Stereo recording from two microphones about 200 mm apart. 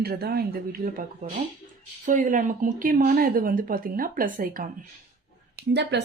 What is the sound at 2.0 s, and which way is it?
Speech, 40° right (ahead or behind).